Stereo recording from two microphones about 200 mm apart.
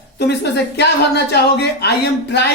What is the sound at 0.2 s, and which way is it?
A woman's voice, 60° left (ahead or behind).